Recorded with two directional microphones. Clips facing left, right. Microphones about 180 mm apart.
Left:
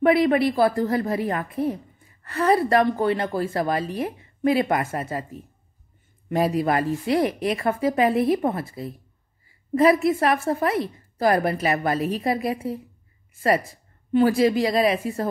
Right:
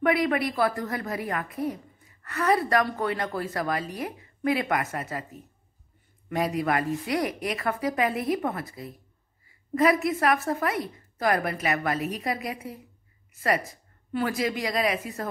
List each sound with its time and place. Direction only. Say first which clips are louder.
0.0 s a woman's voice: left 6 dB; 30° left (ahead or behind)